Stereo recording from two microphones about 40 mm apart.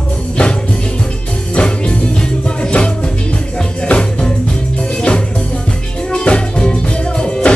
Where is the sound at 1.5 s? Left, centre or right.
Left.